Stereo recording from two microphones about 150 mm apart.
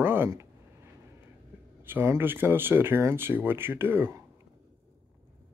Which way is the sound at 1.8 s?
15° right (ahead or behind).